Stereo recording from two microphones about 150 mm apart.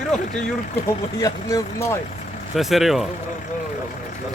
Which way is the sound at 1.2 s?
25° left (ahead or behind).